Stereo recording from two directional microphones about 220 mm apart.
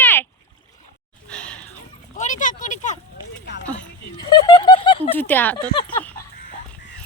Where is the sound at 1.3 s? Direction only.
5° left (ahead or behind).